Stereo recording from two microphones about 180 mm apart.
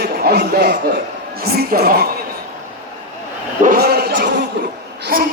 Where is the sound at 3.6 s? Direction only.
55° right (ahead or behind).